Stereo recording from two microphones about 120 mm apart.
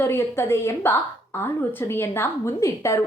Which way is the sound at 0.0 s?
20° left (ahead or behind).